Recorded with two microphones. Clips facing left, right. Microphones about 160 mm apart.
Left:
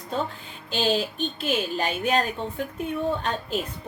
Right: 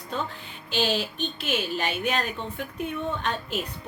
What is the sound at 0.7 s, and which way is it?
A woman's voice, 40° left (ahead or behind).